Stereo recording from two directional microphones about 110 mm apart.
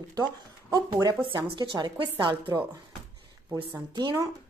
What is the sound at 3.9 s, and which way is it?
Speech, 40° right (ahead or behind).